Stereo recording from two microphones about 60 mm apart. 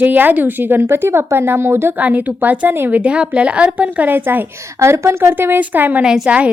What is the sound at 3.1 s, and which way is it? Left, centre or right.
A woman's voice, centre.